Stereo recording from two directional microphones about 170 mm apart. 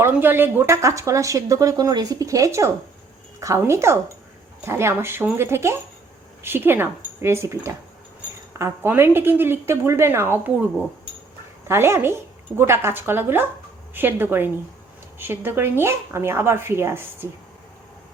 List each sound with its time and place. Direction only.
0.0 s a woman's voice: 15° right (ahead or behind)